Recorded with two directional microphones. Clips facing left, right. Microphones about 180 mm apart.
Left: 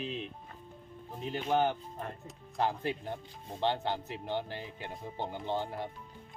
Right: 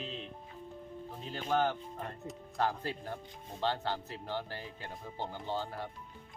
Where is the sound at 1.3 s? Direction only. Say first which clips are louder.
Left 2 dB; 15° left (ahead or behind).